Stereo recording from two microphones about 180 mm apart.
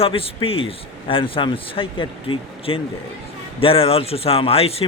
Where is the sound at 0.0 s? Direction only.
30° left (ahead or behind).